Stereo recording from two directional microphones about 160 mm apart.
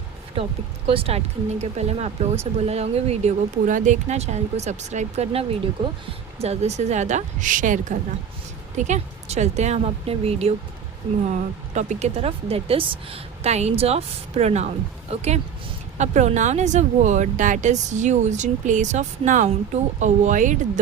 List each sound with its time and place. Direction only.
0.4 s speech: 35° right (ahead or behind)
3.7 s speech: 50° right (ahead or behind)
11.7 s speech: 45° right (ahead or behind)